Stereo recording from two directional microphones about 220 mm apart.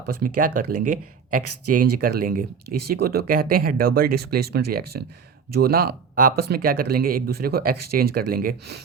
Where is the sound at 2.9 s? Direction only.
45° right (ahead or behind).